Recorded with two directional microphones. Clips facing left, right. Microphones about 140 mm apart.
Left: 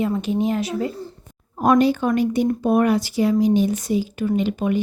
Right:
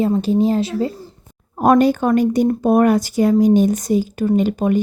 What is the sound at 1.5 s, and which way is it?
Speech, 50° right (ahead or behind).